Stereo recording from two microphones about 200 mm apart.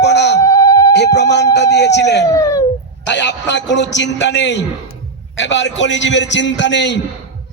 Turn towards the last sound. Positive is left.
turn(degrees=60)  # may be behind; listen again after turning